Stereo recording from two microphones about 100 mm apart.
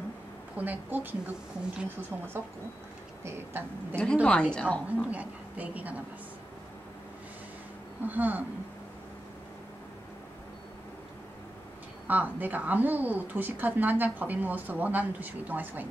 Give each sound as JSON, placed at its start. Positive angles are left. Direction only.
{"t": 0.6, "sound": "a woman's voice", "side_deg": -15}
{"t": 3.9, "sound": "a woman's voice", "side_deg": 10}
{"t": 5.1, "sound": "a woman's voice", "side_deg": -15}
{"t": 8.0, "sound": "a woman's voice", "side_deg": -15}
{"t": 12.1, "sound": "a woman's voice", "side_deg": -15}